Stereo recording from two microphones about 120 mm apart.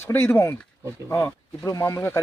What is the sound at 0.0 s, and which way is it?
Speech, 20° left (ahead or behind).